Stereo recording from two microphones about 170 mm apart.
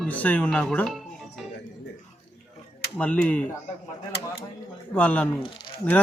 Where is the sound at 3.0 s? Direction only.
10° left (ahead or behind).